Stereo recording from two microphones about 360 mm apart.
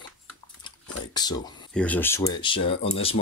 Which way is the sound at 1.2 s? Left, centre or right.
Centre.